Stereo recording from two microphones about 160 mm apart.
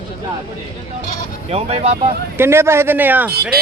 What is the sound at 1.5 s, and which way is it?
Speech, 40° right (ahead or behind).